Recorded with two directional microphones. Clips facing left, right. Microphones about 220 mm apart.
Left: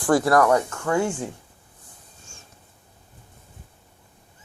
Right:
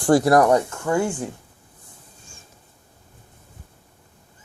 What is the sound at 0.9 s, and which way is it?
Speech, 5° right (ahead or behind).